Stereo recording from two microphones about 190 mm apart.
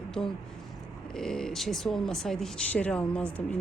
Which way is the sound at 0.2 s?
Centre (ahead or behind).